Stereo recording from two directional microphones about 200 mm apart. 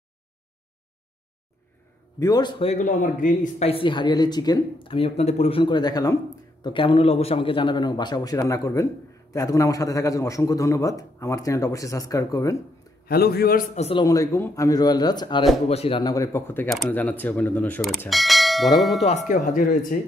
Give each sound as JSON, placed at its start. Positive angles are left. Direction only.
{"t": 2.1, "sound": "a man's voice", "side_deg": 20}
{"t": 13.0, "sound": "a man's voice", "side_deg": 50}
{"t": 13.7, "sound": "speech", "side_deg": 30}
{"t": 14.0, "sound": "a man's voice", "side_deg": 15}
{"t": 16.0, "sound": "a man's voice", "side_deg": 15}
{"t": 18.8, "sound": "tubular bells", "side_deg": 0}
{"t": 19.0, "sound": "speech", "side_deg": 35}